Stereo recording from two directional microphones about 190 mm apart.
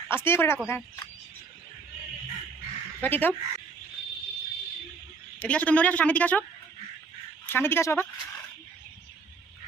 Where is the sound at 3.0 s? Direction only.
10° left (ahead or behind).